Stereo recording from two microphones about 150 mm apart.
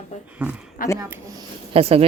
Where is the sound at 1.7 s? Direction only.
40° right (ahead or behind).